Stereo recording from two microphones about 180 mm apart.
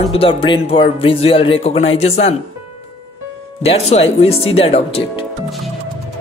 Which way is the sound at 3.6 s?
35° left (ahead or behind).